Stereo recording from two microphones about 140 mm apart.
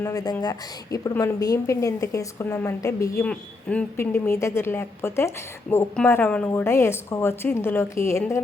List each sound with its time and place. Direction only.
0.0 s speech: 25° left (ahead or behind)
3.2 s speech: 10° left (ahead or behind)